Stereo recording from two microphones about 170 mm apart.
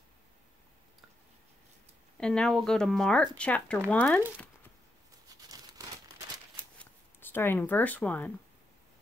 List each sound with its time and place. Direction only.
2.1 s speech: 5° left (ahead or behind)
5.3 s tearing: 25° right (ahead or behind)
6.8 s speech: 10° left (ahead or behind)